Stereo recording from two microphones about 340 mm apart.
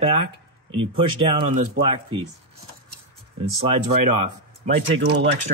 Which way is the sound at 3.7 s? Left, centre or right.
Right.